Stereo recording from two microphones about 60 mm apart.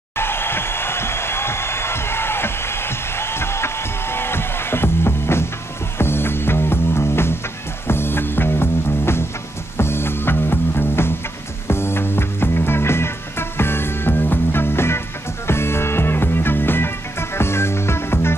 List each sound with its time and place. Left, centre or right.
0.2 s music: left